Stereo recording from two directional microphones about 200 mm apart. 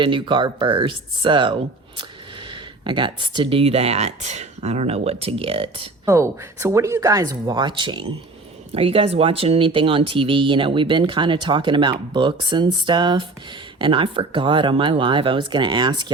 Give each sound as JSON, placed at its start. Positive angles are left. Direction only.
{"t": 0.0, "sound": "speech", "side_deg": -25}
{"t": 6.1, "sound": "speech", "side_deg": -15}